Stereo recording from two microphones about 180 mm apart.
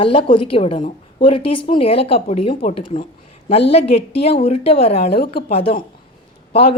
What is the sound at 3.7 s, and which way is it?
A woman's voice, 35° left (ahead or behind).